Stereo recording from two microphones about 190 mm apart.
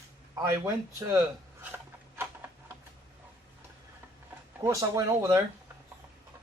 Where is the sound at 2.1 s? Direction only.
10° right (ahead or behind).